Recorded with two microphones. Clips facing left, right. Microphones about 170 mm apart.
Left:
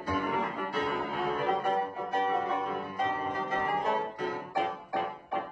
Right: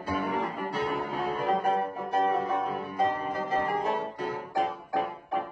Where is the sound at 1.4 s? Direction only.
40° right (ahead or behind).